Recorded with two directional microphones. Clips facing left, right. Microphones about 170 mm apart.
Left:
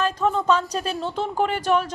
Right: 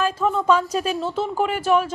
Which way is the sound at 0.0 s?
5° right (ahead or behind).